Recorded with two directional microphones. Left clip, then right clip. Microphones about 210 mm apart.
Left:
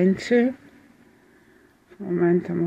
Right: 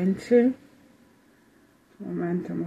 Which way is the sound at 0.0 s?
45° left (ahead or behind).